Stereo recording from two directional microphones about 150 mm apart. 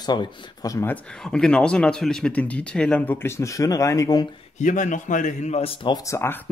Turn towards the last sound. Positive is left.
turn(degrees=20)  # may be behind; listen again after turning